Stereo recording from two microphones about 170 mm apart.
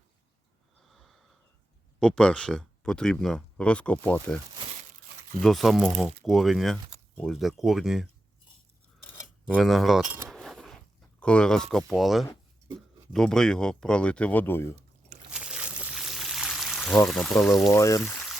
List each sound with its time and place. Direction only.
0.9 s snort: centre (ahead or behind)
2.0 s speech: 5° left (ahead or behind)
5.4 s speech: centre (ahead or behind)
9.5 s speech: centre (ahead or behind)
10.2 s zipper: centre (ahead or behind)
13.1 s speech: 5° left (ahead or behind)
15.3 s pour: 5° right (ahead or behind)
17.7 s speech: 20° left (ahead or behind)